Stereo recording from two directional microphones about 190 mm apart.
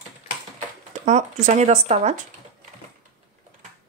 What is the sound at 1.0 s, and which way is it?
Speech, 40° right (ahead or behind).